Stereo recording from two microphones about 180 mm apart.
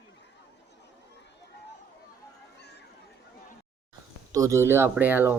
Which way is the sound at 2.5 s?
65° left (ahead or behind).